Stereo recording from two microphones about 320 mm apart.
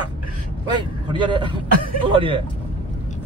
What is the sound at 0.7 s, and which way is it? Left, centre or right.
A man's voice, centre.